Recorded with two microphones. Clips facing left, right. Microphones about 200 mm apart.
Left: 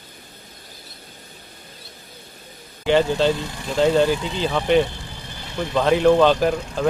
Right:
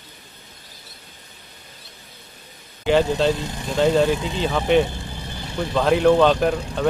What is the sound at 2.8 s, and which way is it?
Speech, centre (ahead or behind).